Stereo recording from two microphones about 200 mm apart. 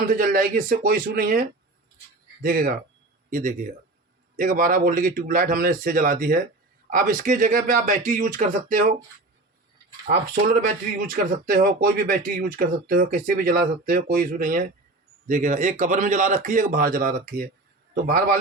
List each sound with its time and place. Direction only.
0.1 s a man's voice: 45° right (ahead or behind)
10.1 s a man's voice: 45° right (ahead or behind)